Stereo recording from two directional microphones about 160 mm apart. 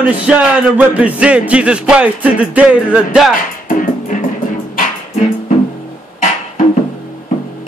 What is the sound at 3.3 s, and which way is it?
Music, 55° left (ahead or behind).